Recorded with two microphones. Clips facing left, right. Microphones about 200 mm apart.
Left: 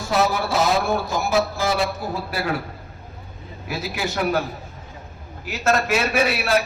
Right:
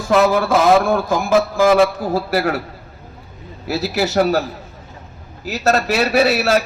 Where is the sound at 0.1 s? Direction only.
55° right (ahead or behind).